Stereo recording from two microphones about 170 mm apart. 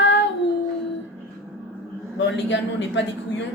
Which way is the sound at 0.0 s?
90° left.